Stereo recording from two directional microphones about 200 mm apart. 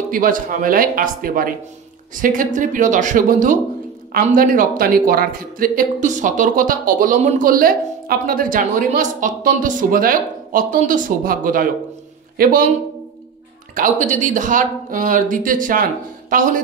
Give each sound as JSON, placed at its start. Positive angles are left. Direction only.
{"t": 0.1, "sound": "speech", "side_deg": -45}
{"t": 13.7, "sound": "speech", "side_deg": -40}